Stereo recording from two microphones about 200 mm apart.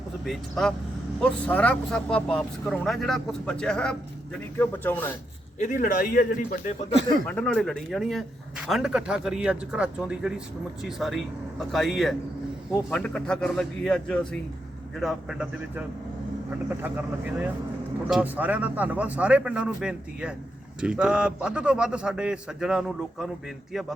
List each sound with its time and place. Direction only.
0.3 s speech: centre (ahead or behind)
5.5 s a man's voice: 40° left (ahead or behind)
7.3 s a man's voice: 5° left (ahead or behind)